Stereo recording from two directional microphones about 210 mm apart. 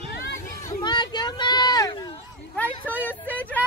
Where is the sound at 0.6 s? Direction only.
15° left (ahead or behind).